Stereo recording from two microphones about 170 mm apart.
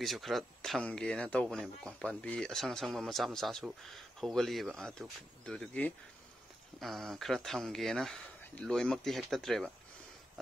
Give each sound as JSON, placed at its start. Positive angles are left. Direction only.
{"t": 0.0, "sound": "speech", "side_deg": 0}